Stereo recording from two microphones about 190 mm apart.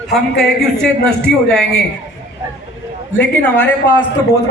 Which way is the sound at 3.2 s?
5° left (ahead or behind).